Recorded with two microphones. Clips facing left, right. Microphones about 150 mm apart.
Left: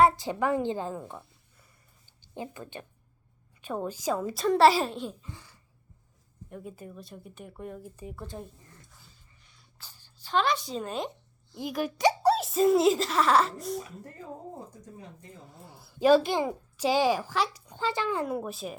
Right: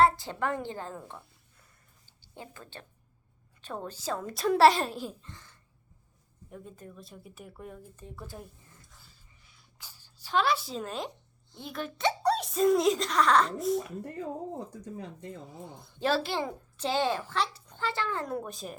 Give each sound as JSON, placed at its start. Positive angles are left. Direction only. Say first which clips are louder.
{"t": 0.0, "sound": "a woman's voice", "louder": "left 2 dB", "side_deg": 15}
{"t": 2.2, "sound": "a child's voice", "louder": "left 7 dB", "side_deg": 15}
{"t": 5.3, "sound": "a child's voice", "louder": "left 4 dB", "side_deg": 10}
{"t": 9.7, "sound": "a child's voice", "louder": "even", "side_deg": -10}
{"t": 14.7, "sound": "speech", "louder": "right 6 dB", "side_deg": -75}
{"t": 15.4, "sound": "a child's voice", "louder": "right 5 dB", "side_deg": 0}